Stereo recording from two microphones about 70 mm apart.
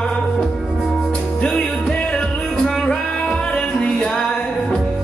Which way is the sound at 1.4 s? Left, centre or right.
Centre.